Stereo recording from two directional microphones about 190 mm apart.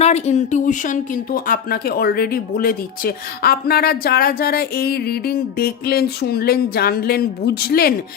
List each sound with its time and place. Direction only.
0.0 s speech: 35° left (ahead or behind); by 7.9 s 55° left (ahead or behind)